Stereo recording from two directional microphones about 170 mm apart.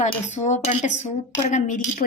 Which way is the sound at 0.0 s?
45° left (ahead or behind).